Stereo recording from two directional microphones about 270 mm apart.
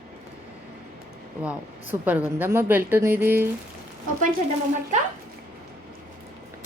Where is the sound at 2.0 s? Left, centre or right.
Centre.